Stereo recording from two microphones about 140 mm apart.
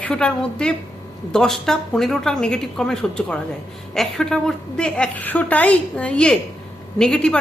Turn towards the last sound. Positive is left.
turn(degrees=5)  # may be behind; listen again after turning